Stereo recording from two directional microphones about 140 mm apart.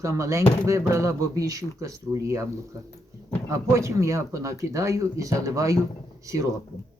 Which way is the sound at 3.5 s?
20° right (ahead or behind).